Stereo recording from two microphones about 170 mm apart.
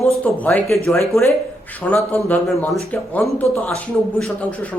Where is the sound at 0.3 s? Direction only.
10° left (ahead or behind).